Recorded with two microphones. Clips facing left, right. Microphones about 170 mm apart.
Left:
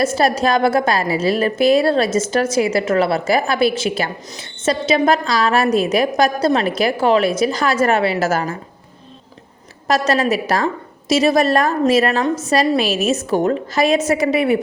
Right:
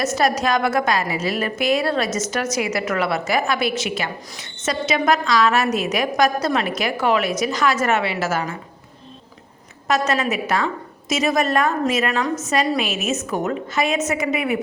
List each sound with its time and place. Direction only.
0.0 s a woman's voice: 30° left (ahead or behind)
9.8 s a woman's voice: 35° left (ahead or behind)